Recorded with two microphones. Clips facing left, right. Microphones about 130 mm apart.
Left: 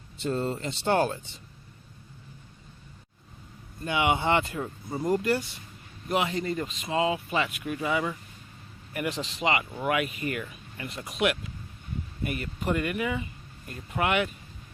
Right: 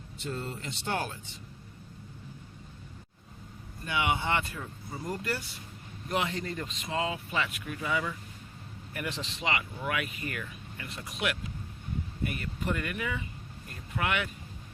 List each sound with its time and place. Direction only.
0.2 s speech: 35° left (ahead or behind)
3.8 s speech: 25° left (ahead or behind)
4.6 s speech: 35° left (ahead or behind)
5.0 s speech: 20° left (ahead or behind)